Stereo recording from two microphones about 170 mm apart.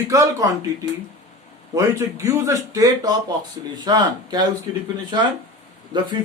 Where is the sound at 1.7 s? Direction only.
15° right (ahead or behind).